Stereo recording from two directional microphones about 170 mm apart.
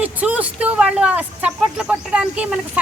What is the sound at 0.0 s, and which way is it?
A woman's voice, 10° right (ahead or behind).